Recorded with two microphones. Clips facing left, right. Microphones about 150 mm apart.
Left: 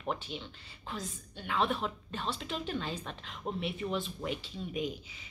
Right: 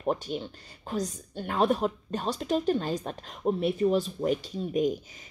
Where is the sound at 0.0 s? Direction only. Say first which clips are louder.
Right 8 dB; 40° right (ahead or behind).